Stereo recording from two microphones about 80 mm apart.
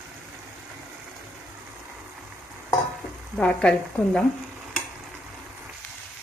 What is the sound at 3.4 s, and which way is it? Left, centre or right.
Speech, centre.